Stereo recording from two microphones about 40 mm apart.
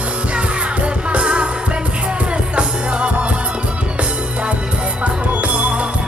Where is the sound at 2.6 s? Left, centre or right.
Right.